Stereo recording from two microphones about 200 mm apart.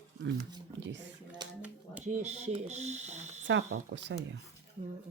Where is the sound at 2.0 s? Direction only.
35° right (ahead or behind).